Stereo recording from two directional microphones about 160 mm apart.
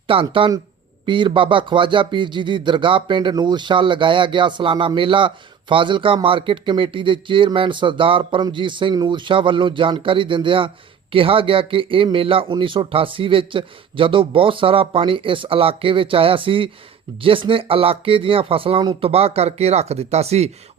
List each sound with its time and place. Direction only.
0.1 s speech: 35° right (ahead or behind)